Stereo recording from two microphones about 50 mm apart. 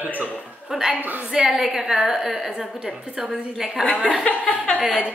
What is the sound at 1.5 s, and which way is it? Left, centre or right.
A woman's voice, centre.